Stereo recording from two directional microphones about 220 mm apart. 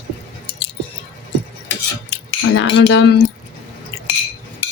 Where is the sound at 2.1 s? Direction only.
55° left (ahead or behind).